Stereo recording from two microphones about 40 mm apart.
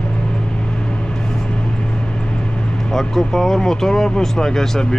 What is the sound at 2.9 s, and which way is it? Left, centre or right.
Speech, centre.